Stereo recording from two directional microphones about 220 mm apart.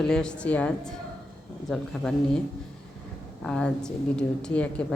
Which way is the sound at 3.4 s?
5° left (ahead or behind).